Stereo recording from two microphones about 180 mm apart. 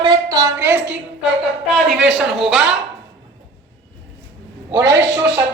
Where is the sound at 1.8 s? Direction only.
Centre (ahead or behind).